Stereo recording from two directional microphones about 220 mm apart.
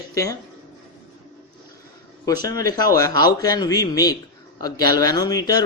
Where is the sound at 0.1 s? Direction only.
15° left (ahead or behind).